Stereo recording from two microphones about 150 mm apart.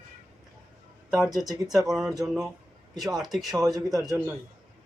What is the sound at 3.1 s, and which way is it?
Speech, centre (ahead or behind).